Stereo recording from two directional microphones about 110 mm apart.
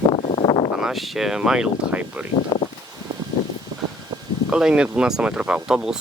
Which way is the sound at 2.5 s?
30° left (ahead or behind).